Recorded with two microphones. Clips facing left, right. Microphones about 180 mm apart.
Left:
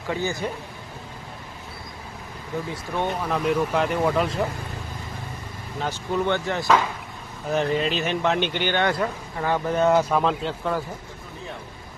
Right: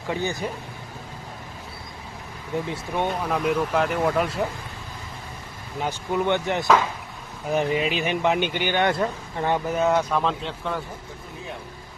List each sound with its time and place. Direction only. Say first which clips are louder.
0.1 s speech: even; 20° right (ahead or behind)
2.7 s speech: left 2 dB; 15° right (ahead or behind)
3.2 s speech: even; 5° right (ahead or behind)
5.8 s speech: even; 15° right (ahead or behind)
8.9 s speech: right 1 dB; 25° right (ahead or behind)
9.6 s speech: left 5 dB; 5° right (ahead or behind)